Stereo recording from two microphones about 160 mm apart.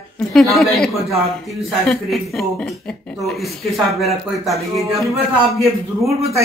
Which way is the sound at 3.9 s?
Centre (ahead or behind).